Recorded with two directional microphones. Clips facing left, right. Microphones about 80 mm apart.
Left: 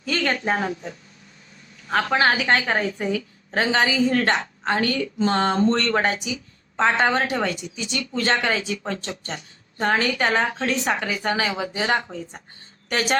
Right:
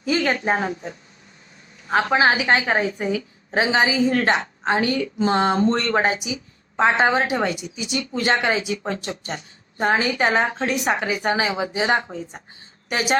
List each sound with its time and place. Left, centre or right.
0.0 s a woman's voice: centre